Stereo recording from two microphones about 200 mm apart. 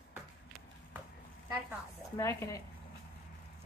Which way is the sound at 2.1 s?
15° left (ahead or behind).